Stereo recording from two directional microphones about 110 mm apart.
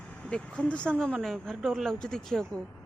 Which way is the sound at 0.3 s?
10° left (ahead or behind).